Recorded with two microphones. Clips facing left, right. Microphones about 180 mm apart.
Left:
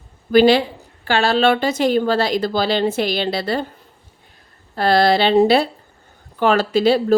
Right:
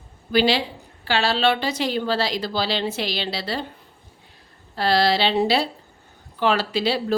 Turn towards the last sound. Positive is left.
turn(degrees=45)  # may be behind; listen again after turning